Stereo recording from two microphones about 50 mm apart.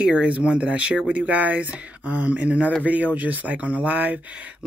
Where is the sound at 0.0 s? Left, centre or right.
Right.